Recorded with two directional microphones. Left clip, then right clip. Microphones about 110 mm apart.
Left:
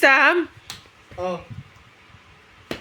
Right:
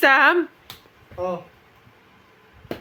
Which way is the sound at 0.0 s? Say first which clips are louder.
Even; 5° right (ahead or behind).